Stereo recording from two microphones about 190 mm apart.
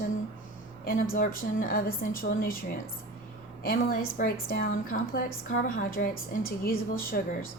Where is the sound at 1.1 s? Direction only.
50° left (ahead or behind).